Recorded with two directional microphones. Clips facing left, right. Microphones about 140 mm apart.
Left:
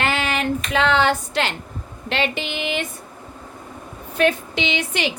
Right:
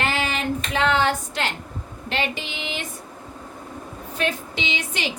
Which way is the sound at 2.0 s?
75° left (ahead or behind).